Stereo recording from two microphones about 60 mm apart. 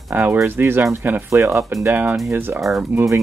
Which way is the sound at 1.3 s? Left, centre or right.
Right.